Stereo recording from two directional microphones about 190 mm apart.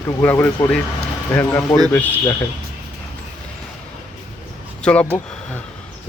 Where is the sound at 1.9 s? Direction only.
10° left (ahead or behind).